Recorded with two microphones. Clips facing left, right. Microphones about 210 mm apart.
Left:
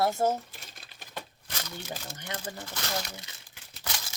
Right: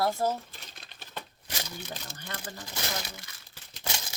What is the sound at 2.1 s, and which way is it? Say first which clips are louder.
Speech: left 3 dB; 15° left (ahead or behind).